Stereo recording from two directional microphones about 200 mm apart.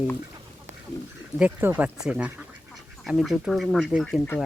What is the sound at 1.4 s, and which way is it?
Speech, 10° right (ahead or behind).